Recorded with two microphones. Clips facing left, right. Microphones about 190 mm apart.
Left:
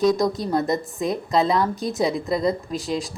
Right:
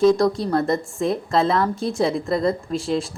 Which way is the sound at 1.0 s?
Centre (ahead or behind).